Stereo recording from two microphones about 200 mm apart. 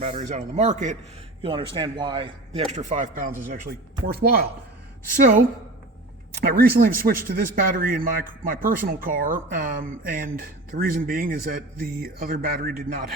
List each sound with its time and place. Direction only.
0.0 s a man's voice: 35° right (ahead or behind)
1.4 s speech: 25° right (ahead or behind)
2.7 s a man's voice: 40° right (ahead or behind)
6.4 s a man's voice: 50° right (ahead or behind)